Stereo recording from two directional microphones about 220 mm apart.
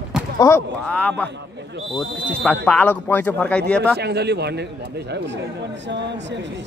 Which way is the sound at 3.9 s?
50° right (ahead or behind).